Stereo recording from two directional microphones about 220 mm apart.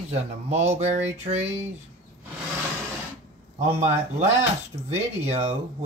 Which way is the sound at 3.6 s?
30° right (ahead or behind).